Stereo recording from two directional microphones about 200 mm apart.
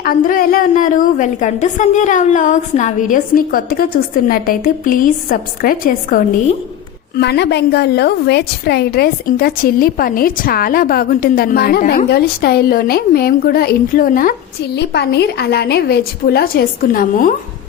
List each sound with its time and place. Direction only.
0.0 s a woman's voice: 45° left (ahead or behind)
7.2 s a woman's voice: 55° left (ahead or behind)
14.8 s a woman's voice: 55° left (ahead or behind)